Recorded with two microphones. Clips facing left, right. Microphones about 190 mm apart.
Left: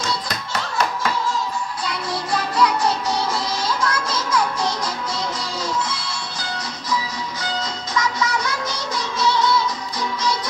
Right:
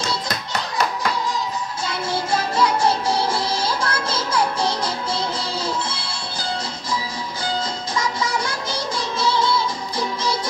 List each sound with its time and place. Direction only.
1.9 s music: 25° right (ahead or behind)
7.9 s music: 30° right (ahead or behind)